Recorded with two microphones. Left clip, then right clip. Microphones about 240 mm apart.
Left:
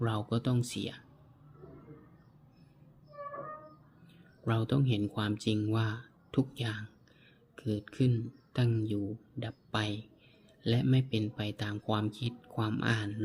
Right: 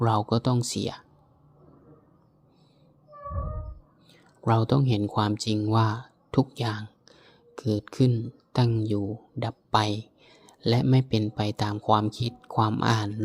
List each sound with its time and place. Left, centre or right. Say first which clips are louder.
0.0 s speech: right 10 dB; right
4.4 s a man's voice: right 9 dB; right